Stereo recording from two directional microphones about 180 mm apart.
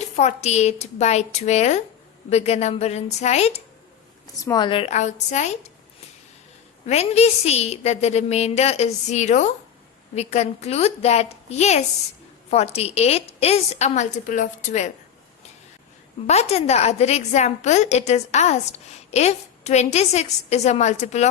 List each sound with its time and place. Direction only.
0.2 s a woman's voice: 40° left (ahead or behind)
4.4 s a woman's voice: 20° left (ahead or behind); by 5.7 s 40° left (ahead or behind)
6.8 s a woman's voice: 35° left (ahead or behind)
16.2 s a woman's voice: 35° left (ahead or behind)